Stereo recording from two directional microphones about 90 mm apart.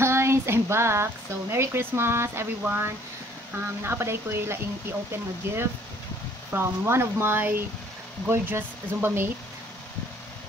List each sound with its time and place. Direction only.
0.0 s speech: 30° right (ahead or behind)